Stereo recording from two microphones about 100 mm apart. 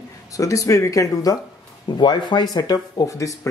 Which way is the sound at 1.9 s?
50° left (ahead or behind).